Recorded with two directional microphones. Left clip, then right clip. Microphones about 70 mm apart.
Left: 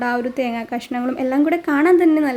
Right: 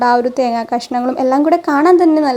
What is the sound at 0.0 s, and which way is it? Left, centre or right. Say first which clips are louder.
A woman's voice: right 8 dB; right.